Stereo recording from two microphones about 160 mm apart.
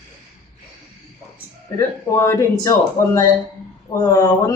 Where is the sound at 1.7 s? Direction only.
15° left (ahead or behind).